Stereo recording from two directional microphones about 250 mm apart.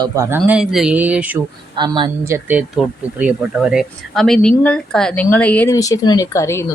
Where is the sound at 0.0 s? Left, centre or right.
Centre.